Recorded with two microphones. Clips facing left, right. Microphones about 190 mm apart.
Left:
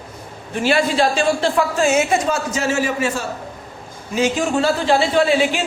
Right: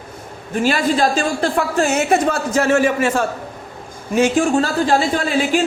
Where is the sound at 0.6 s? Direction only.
45° right (ahead or behind).